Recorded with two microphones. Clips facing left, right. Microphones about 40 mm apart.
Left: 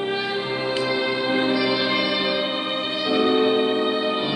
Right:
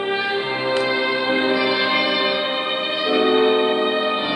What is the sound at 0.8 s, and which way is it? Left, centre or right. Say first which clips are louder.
Music: right 3 dB; right.